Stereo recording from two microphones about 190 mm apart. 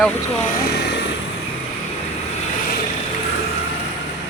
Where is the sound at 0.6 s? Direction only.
60° left (ahead or behind).